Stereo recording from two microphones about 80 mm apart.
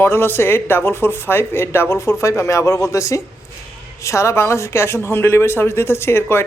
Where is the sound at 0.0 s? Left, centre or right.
Left.